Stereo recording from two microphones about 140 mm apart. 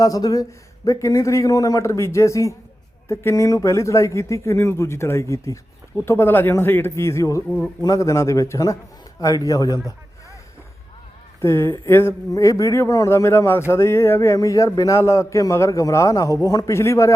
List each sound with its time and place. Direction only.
0.0 s a man's voice: 25° left (ahead or behind)
11.3 s speech: 20° left (ahead or behind)